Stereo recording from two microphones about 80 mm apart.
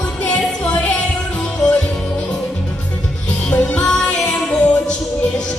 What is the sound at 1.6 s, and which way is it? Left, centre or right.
Music, centre.